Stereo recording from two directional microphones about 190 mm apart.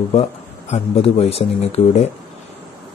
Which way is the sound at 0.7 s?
35° left (ahead or behind).